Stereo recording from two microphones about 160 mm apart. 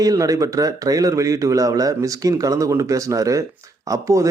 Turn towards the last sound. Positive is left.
turn(degrees=-20)  # may be behind; listen again after turning